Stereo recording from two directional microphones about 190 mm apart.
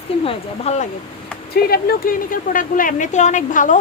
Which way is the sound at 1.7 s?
50° left (ahead or behind).